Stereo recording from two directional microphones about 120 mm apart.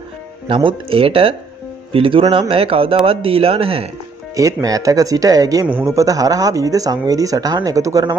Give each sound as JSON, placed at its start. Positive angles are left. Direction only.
{"t": 0.5, "sound": "speech", "side_deg": -45}
{"t": 4.4, "sound": "speech", "side_deg": -30}
{"t": 5.7, "sound": "speech", "side_deg": -15}
{"t": 5.9, "sound": "speech", "side_deg": -30}